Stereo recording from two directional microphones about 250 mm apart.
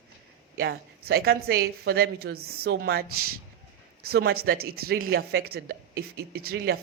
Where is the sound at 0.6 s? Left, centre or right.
Right.